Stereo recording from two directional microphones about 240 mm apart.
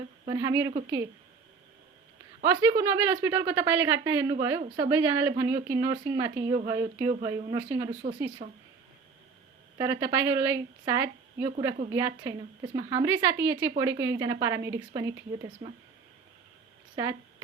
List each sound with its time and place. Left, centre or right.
0.3 s a woman's voice: centre
2.4 s a woman's voice: centre
9.7 s a woman's voice: centre
16.9 s speech: centre